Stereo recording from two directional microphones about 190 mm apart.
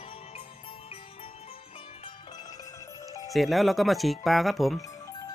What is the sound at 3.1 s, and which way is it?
Music, 20° left (ahead or behind).